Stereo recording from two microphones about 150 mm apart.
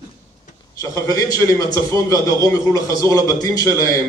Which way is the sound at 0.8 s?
25° left (ahead or behind).